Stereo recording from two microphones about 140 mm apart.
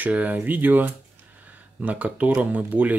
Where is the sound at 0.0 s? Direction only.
10° right (ahead or behind).